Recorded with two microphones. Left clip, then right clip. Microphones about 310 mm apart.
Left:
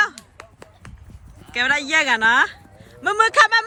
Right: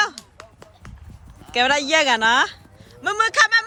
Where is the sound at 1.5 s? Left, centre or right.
Centre.